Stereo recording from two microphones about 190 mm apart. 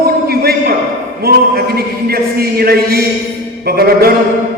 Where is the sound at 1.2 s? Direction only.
55° right (ahead or behind).